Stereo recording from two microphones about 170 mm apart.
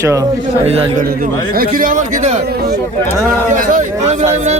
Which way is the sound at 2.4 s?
65° right (ahead or behind).